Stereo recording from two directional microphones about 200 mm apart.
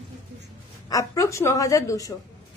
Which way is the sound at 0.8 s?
15° left (ahead or behind).